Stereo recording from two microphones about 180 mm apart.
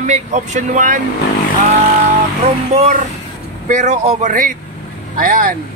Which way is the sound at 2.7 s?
40° right (ahead or behind).